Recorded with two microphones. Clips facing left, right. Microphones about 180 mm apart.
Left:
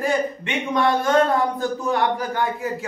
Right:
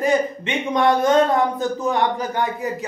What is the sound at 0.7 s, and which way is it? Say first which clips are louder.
Speech: right 3 dB; 20° right (ahead or behind).